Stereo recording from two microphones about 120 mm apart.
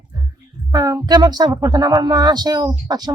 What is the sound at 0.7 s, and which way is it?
Speech, 30° right (ahead or behind).